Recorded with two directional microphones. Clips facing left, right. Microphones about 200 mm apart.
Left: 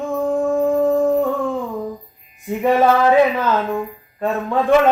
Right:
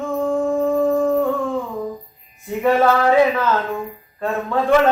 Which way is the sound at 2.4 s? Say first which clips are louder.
Left 1 dB; 15° left (ahead or behind).